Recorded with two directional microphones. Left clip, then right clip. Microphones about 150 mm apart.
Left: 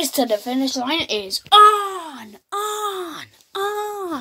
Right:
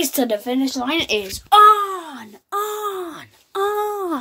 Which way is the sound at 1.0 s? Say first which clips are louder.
Right 1 dB; 5° right (ahead or behind).